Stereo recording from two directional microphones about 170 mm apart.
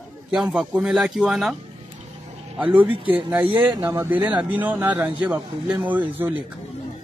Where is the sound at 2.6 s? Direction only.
10° right (ahead or behind).